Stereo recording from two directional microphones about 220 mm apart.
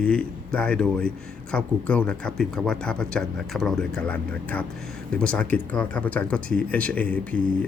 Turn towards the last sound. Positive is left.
turn(degrees=5)  # may be behind; listen again after turning